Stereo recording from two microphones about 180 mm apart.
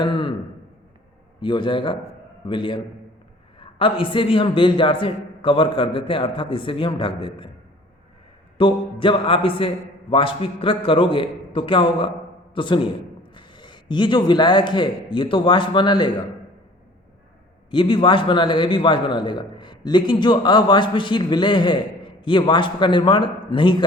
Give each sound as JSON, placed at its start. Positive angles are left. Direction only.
{"t": 0.0, "sound": "a sound", "side_deg": 30}
{"t": 1.4, "sound": "a man's voice", "side_deg": 25}
{"t": 8.5, "sound": "a man's voice", "side_deg": 30}
{"t": 17.7, "sound": "a man's voice", "side_deg": 25}